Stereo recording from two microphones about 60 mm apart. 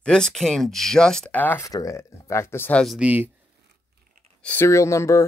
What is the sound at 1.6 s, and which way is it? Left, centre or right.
Speech, left.